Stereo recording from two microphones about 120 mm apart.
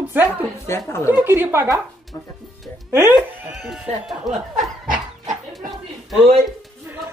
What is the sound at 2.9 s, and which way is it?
Speech, 20° right (ahead or behind).